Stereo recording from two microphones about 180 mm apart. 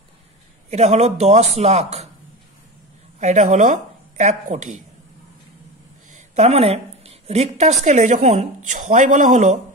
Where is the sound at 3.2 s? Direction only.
45° right (ahead or behind).